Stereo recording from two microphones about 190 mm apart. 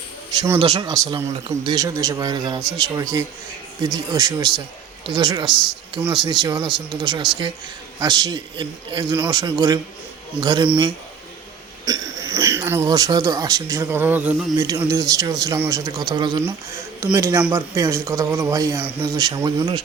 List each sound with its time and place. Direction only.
0.3 s speech: 15° right (ahead or behind)
0.6 s speech: 30° right (ahead or behind)
0.9 s speech: 20° right (ahead or behind)
11.9 s speech: 20° right (ahead or behind)